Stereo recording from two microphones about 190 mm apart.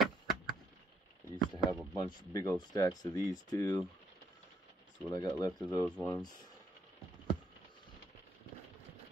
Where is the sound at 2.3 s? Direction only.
20° left (ahead or behind).